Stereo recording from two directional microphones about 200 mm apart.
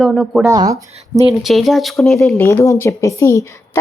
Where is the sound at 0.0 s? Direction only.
Centre (ahead or behind).